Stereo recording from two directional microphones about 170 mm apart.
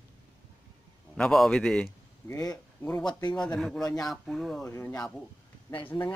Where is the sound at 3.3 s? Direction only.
5° left (ahead or behind).